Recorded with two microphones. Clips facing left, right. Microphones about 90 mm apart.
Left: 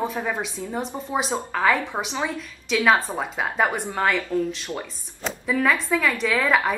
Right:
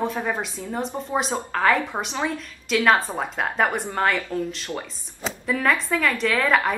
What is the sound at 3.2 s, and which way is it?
Speech, 5° left (ahead or behind).